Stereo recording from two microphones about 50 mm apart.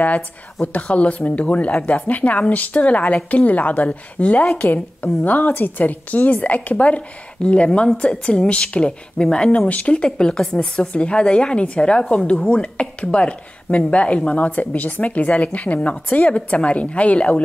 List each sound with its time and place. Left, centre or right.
0.7 s speech: left